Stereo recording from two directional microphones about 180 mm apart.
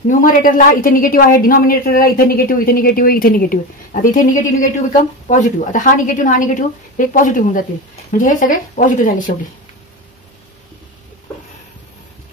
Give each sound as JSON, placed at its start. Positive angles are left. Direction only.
{"t": 0.2, "sound": "a woman's voice", "side_deg": 50}